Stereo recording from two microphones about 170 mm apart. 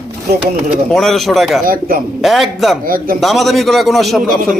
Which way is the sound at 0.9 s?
Centre (ahead or behind).